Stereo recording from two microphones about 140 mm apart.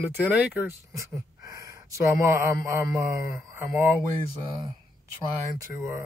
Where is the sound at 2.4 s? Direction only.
20° right (ahead or behind).